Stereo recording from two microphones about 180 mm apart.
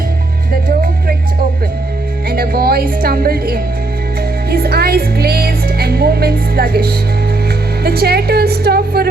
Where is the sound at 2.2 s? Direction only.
60° right (ahead or behind).